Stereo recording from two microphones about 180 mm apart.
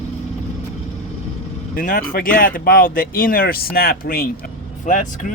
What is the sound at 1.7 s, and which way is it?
Speech, 50° left (ahead or behind).